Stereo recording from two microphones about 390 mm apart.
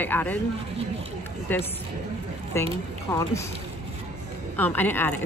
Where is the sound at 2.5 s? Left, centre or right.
Centre.